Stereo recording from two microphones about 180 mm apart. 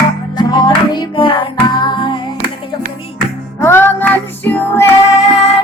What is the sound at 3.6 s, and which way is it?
Music, 15° left (ahead or behind).